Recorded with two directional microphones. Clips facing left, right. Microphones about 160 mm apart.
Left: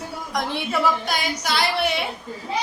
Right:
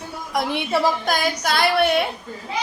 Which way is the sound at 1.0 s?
50° right (ahead or behind).